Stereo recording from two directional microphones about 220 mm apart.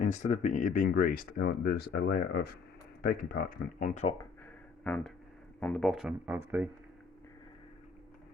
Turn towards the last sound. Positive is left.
turn(degrees=-10)  # may be behind; listen again after turning